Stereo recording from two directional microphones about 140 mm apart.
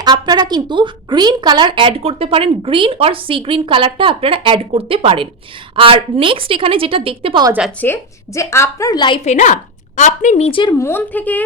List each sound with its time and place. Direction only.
0.0 s speech: 30° right (ahead or behind)
7.8 s a woman's voice: 20° left (ahead or behind)
9.2 s a woman's voice: 60° left (ahead or behind)
10.6 s a woman's voice: 30° left (ahead or behind)
10.8 s a woman's voice: 15° left (ahead or behind)